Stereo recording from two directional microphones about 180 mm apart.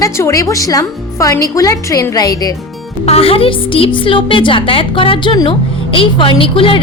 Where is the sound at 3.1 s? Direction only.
30° left (ahead or behind).